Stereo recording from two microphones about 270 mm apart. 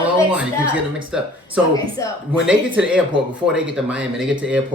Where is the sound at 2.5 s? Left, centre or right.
Centre.